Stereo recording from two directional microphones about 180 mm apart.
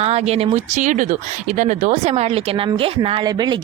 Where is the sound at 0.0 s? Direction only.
35° right (ahead or behind).